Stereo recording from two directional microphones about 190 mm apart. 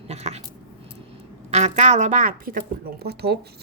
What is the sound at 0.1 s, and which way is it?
Speech, 35° right (ahead or behind).